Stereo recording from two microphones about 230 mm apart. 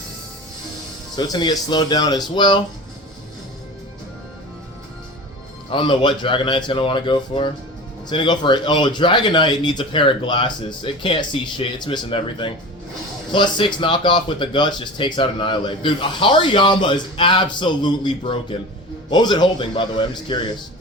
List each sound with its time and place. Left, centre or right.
1.1 s speech: centre
5.7 s speech: left